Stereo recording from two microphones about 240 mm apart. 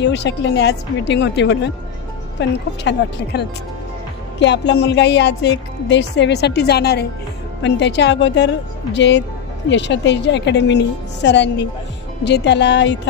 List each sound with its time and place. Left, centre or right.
0.0 s a woman's voice: left
2.8 s a woman's voice: left